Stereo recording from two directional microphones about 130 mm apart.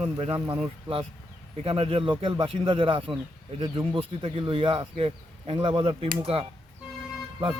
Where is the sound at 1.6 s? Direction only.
45° right (ahead or behind).